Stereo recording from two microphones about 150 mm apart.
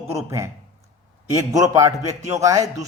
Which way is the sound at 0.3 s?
20° right (ahead or behind).